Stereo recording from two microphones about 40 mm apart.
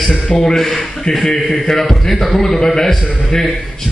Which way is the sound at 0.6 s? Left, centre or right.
Centre.